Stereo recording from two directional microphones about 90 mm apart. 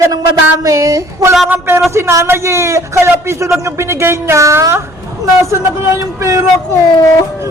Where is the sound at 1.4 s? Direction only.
25° right (ahead or behind).